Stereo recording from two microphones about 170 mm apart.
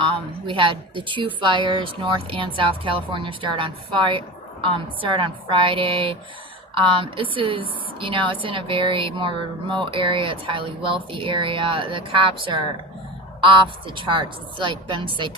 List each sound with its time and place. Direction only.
0.0 s a woman's voice: 30° right (ahead or behind)